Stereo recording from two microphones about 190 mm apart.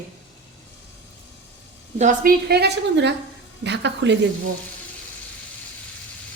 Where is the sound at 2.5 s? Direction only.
60° right (ahead or behind).